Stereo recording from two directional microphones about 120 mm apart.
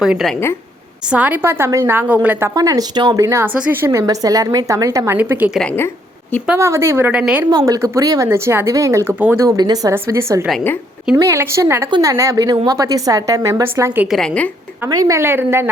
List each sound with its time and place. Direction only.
0.0 s speech: 5° right (ahead or behind)
1.1 s a woman's voice: 15° right (ahead or behind)
2.6 s a woman's voice: 30° right (ahead or behind)
4.0 s a woman's voice: 30° right (ahead or behind)
6.6 s a woman's voice: 25° right (ahead or behind)
7.1 s a woman's voice: 10° right (ahead or behind)
7.5 s a woman's voice: 30° right (ahead or behind)
11.9 s a woman's voice: 40° right (ahead or behind)
12.1 s a woman's voice: 25° right (ahead or behind)
14.1 s a woman's voice: 10° left (ahead or behind)
14.8 s a woman's voice: 30° right (ahead or behind)